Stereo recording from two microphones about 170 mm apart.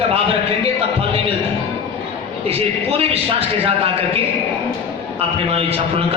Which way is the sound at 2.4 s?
35° right (ahead or behind).